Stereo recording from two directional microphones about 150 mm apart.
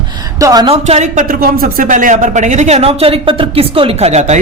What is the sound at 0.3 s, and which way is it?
Speech, 25° right (ahead or behind).